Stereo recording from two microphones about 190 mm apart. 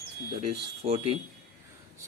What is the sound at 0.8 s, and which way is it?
Speech, 30° right (ahead or behind).